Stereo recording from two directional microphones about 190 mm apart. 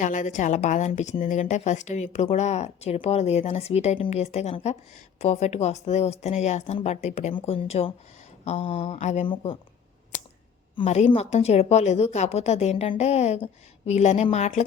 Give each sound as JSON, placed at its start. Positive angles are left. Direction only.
{"t": 0.0, "sound": "a woman's voice", "side_deg": 40}
{"t": 10.8, "sound": "a woman's voice", "side_deg": 30}